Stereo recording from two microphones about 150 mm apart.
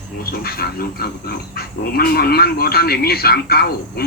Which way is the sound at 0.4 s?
90° left.